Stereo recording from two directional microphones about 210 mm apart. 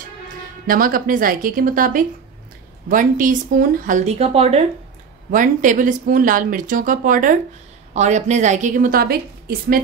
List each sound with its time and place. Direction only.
0.7 s speech: 45° right (ahead or behind)